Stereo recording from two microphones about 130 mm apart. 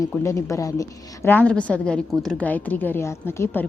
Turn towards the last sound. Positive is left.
turn(degrees=20)  # may be behind; listen again after turning